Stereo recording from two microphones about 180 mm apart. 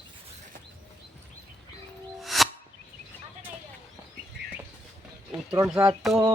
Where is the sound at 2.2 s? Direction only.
Centre (ahead or behind).